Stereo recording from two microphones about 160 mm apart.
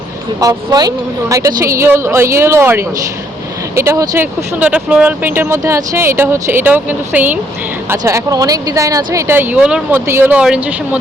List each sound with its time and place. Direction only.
0.3 s speech: 25° right (ahead or behind); by 11.0 s 10° right (ahead or behind)